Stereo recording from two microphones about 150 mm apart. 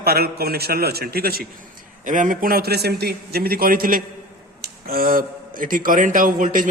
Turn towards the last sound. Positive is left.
turn(degrees=-60)  # may be behind; listen again after turning